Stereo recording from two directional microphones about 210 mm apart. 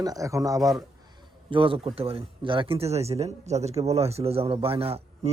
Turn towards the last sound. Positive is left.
turn(degrees=-30)  # may be behind; listen again after turning